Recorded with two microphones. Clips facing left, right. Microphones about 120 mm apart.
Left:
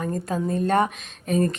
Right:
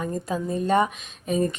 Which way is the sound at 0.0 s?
5° right (ahead or behind).